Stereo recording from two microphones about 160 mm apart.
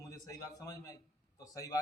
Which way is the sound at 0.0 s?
20° left (ahead or behind).